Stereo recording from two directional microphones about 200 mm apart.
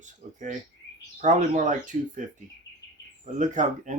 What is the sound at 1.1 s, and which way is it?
Speech, 35° right (ahead or behind).